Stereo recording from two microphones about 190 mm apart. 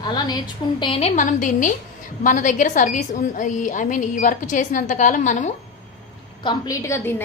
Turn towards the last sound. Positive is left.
turn(degrees=10)  # may be behind; listen again after turning